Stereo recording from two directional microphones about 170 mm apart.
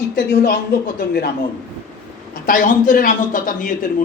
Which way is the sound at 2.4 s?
50° left (ahead or behind).